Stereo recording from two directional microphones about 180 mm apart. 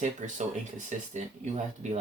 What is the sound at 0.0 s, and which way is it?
Speech, 40° right (ahead or behind).